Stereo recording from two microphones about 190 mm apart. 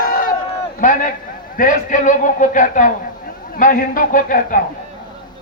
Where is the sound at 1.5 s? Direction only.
45° left (ahead or behind).